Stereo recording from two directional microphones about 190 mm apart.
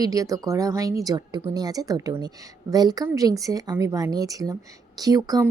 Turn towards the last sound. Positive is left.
turn(degrees=-20)  # may be behind; listen again after turning